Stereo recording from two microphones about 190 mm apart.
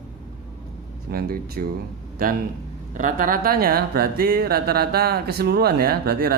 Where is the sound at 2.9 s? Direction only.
45° right (ahead or behind).